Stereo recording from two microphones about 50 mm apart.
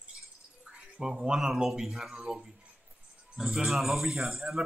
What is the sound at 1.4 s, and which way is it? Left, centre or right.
A man's voice, centre.